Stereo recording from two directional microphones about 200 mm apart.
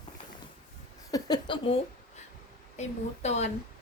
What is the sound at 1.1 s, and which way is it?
Speech, 20° left (ahead or behind).